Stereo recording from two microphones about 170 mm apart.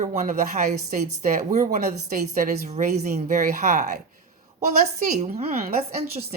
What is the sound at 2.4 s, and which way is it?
A woman's voice, 45° right (ahead or behind).